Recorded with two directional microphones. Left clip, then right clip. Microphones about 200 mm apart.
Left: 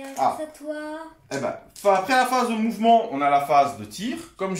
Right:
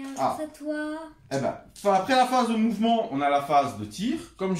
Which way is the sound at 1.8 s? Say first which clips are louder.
Left 2 dB; 15° left (ahead or behind).